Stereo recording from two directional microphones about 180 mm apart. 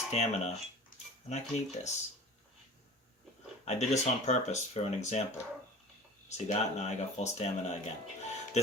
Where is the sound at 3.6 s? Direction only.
40° left (ahead or behind).